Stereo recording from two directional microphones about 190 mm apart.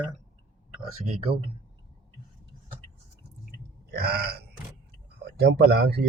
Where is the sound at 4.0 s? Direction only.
55° right (ahead or behind).